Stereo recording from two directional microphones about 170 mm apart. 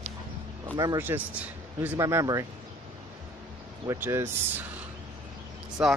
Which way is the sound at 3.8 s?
15° right (ahead or behind).